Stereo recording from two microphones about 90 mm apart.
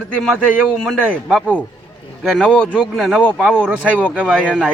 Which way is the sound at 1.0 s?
15° right (ahead or behind).